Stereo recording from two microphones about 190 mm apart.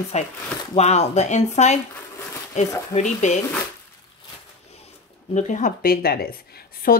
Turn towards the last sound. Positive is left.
turn(degrees=55)  # may be behind; listen again after turning